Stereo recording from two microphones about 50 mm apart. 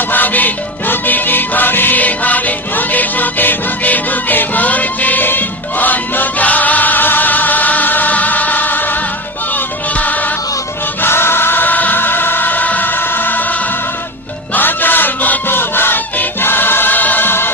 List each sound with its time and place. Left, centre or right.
0.1 s music: left
11.0 s music: left